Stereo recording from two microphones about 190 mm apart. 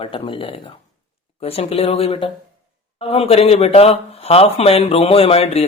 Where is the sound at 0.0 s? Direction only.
30° left (ahead or behind).